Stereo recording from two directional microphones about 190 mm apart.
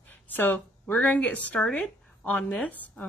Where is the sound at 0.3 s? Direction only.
10° left (ahead or behind).